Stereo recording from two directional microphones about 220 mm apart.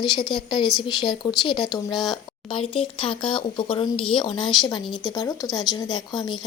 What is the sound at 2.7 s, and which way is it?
A woman's voice, 25° left (ahead or behind).